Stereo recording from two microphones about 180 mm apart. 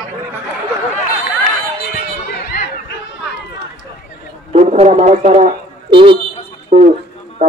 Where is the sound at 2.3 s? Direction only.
60° left (ahead or behind).